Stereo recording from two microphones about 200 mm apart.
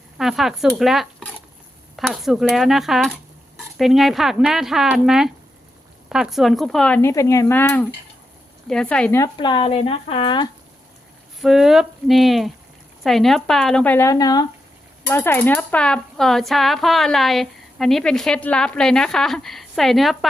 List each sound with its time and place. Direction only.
0.2 s speech: centre (ahead or behind)
9.2 s speech: 25° left (ahead or behind)
11.3 s speech: centre (ahead or behind)